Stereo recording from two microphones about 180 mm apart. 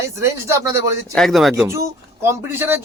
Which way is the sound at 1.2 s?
Centre (ahead or behind).